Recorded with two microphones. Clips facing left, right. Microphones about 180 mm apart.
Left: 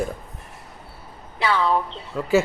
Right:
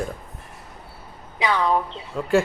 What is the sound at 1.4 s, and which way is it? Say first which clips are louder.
Speech: even; 15° right (ahead or behind).